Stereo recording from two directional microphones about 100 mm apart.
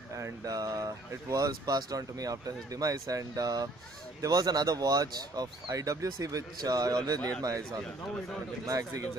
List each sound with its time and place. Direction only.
0.2 s speech: 35° right (ahead or behind)
8.6 s speech: 35° right (ahead or behind)